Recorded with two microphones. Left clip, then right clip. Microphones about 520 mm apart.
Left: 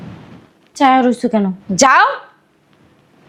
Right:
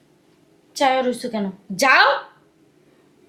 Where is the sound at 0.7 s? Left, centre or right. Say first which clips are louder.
Left 7 dB; left.